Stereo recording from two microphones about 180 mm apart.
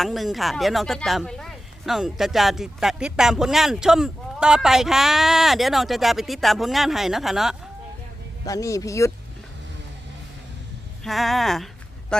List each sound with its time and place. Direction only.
0.0 s speech: centre (ahead or behind)
8.4 s speech: 20° left (ahead or behind)
11.0 s speech: centre (ahead or behind)